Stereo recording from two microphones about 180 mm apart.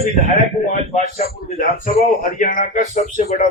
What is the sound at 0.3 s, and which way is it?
Speech, 45° left (ahead or behind).